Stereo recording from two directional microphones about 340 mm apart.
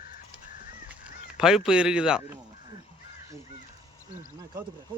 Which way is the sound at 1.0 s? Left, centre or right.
Centre.